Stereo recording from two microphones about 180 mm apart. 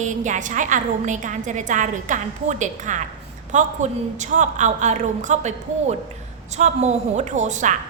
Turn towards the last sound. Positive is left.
turn(degrees=-45)  # may be behind; listen again after turning